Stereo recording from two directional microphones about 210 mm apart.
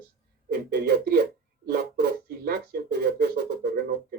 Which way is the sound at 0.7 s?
50° right (ahead or behind).